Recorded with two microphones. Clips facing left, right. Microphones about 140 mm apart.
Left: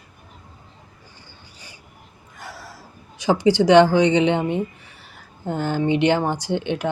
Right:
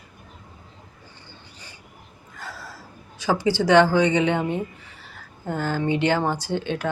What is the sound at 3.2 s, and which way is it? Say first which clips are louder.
Speech: left 5 dB; 20° left (ahead or behind).